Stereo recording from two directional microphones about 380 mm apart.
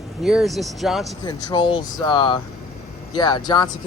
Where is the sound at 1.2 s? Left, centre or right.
Centre.